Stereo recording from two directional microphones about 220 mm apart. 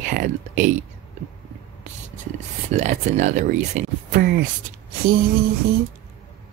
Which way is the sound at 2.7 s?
30° right (ahead or behind).